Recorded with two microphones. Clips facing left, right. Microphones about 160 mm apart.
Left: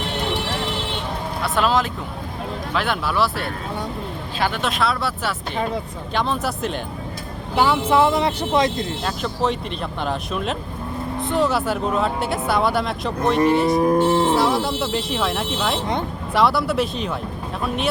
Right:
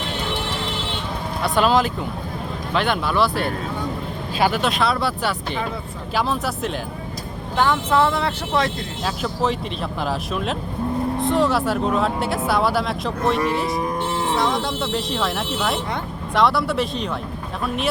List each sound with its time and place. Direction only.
1.5 s speech: centre (ahead or behind)
4.4 s speech: 10° right (ahead or behind)
4.6 s speech: centre (ahead or behind)
9.0 s speech: centre (ahead or behind)
13.8 s cattle: 30° left (ahead or behind)
14.3 s speech: 5° left (ahead or behind)